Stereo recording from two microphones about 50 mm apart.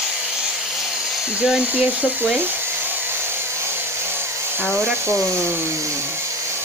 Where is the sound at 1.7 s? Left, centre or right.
Right.